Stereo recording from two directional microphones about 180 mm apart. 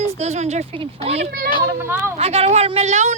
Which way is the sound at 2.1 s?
35° right (ahead or behind).